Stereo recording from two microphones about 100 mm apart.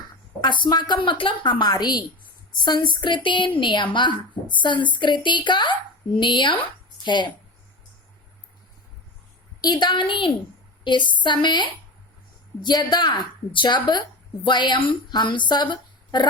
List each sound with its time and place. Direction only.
0.6 s a woman's voice: 50° left (ahead or behind)
9.6 s a woman's voice: 45° left (ahead or behind)